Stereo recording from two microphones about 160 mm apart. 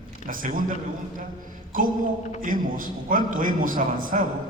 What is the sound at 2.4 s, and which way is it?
A man's voice, 60° right (ahead or behind).